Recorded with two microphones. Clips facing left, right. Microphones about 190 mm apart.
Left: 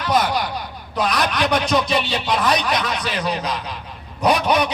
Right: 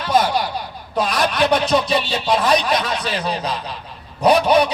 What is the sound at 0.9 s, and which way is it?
A man's voice, 30° right (ahead or behind).